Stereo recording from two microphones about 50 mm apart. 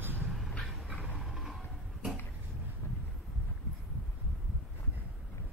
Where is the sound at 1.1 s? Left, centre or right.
Centre.